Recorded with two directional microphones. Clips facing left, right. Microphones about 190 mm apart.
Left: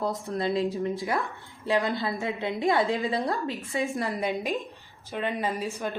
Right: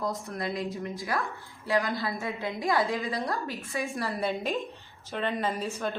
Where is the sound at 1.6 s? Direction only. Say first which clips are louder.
Left 2 dB; 25° left (ahead or behind).